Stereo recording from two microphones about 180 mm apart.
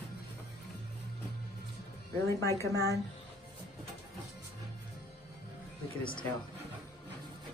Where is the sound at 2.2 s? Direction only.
15° left (ahead or behind).